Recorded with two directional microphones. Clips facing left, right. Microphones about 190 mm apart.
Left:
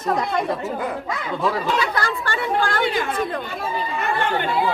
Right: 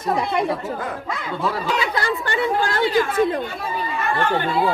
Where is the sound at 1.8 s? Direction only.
20° right (ahead or behind).